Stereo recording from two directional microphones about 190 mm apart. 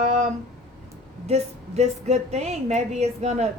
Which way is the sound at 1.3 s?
35° right (ahead or behind).